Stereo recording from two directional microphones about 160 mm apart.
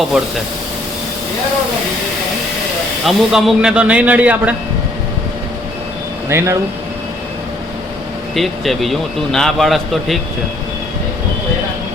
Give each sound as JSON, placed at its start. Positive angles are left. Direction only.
{"t": 3.1, "sound": "speech", "side_deg": 0}
{"t": 6.2, "sound": "speech", "side_deg": -15}
{"t": 8.4, "sound": "speech", "side_deg": 0}